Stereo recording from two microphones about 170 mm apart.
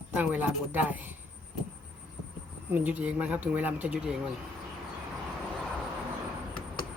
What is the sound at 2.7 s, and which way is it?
Speech, 10° right (ahead or behind).